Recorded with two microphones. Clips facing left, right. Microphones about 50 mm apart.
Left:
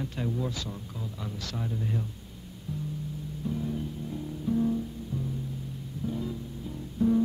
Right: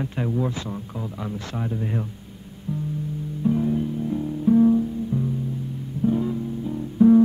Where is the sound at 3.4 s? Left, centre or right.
Right.